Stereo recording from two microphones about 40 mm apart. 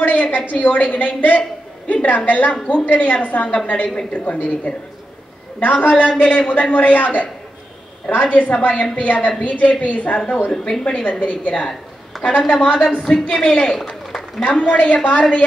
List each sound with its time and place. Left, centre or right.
0.0 s a sound: left
0.5 s a man's voice: left
10.5 s speech: centre
10.9 s a man's voice: left
13.7 s a sound: centre
14.5 s a man's voice: left